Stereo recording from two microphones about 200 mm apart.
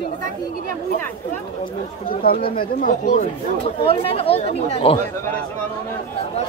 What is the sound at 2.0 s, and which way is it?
Speech, 45° left (ahead or behind).